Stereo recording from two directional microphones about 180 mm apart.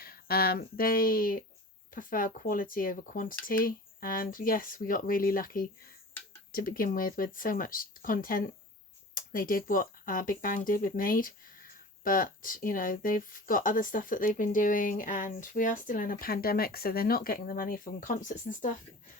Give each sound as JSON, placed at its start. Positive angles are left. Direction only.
{"t": 0.0, "sound": "speech", "side_deg": 55}